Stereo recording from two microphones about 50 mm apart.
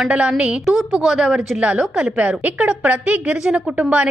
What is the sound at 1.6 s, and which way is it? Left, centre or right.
Speech, right.